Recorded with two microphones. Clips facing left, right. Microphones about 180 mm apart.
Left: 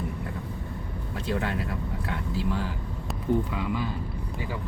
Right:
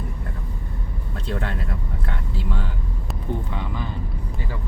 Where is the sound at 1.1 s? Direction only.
5° left (ahead or behind).